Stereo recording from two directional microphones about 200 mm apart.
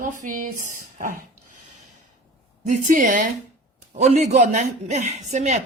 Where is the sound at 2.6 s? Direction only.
40° right (ahead or behind).